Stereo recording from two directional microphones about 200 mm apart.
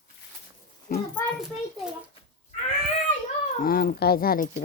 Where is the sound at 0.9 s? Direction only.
45° left (ahead or behind).